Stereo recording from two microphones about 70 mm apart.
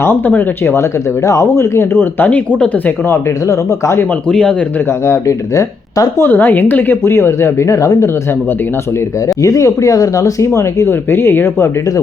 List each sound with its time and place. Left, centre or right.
0.0 s speech: left
0.7 s a woman's voice: left
3.1 s speech: left
4.3 s speech: centre
5.0 s speech: left
6.2 s a woman's voice: left
9.4 s speech: left